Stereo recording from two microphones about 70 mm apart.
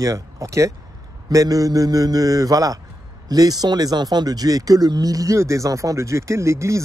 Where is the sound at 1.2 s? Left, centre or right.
Right.